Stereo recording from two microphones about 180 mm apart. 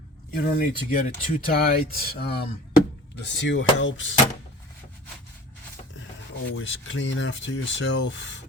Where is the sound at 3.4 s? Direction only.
90° left.